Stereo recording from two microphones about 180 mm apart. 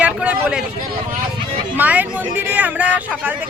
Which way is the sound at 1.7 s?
10° right (ahead or behind).